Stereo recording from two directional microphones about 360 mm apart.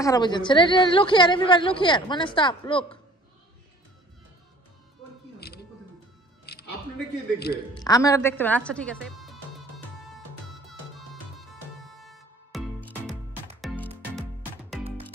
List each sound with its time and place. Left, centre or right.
0.0 s a woman's voice: centre
5.4 s music: left
7.8 s a woman's voice: centre
12.0 s music: centre